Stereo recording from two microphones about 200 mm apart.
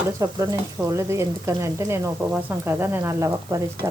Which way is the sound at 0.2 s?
15° right (ahead or behind).